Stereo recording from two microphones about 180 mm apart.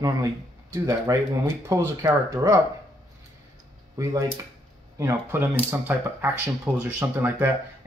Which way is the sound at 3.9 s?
20° right (ahead or behind).